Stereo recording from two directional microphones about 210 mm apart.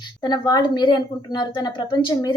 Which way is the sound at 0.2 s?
20° left (ahead or behind).